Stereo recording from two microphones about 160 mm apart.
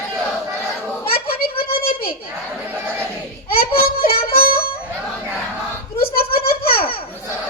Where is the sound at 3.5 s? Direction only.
65° left (ahead or behind).